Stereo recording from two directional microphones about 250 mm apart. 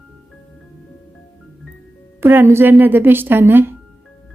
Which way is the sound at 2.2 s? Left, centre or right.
Centre.